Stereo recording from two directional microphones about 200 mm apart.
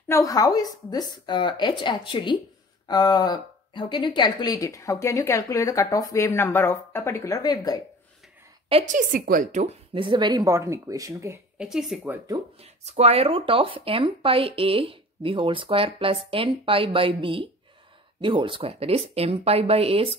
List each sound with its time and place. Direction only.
0.1 s a woman's voice: 15° left (ahead or behind)
8.6 s speech: 35° right (ahead or behind); by 12.4 s 10° right (ahead or behind)
12.8 s speech: 30° right (ahead or behind)